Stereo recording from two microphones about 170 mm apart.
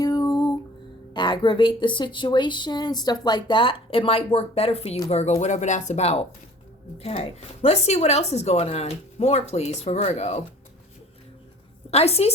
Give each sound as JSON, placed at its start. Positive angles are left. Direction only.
{"t": 0.0, "sound": "music", "side_deg": 20}
{"t": 1.1, "sound": "speech", "side_deg": 25}
{"t": 11.9, "sound": "a woman's voice", "side_deg": 40}